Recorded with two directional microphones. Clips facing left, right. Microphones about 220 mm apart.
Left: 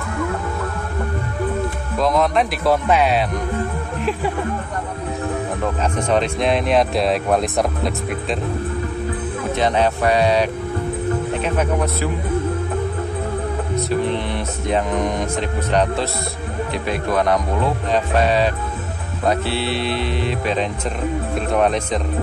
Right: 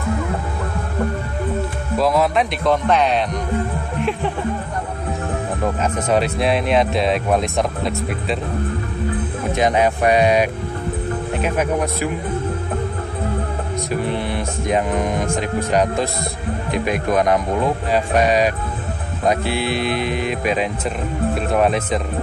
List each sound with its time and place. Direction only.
2.0 s speech: 5° right (ahead or behind)
2.6 s speech: 5° left (ahead or behind)
6.0 s speech: 5° right (ahead or behind)
9.6 s speech: 15° right (ahead or behind)
14.7 s speech: 5° right (ahead or behind)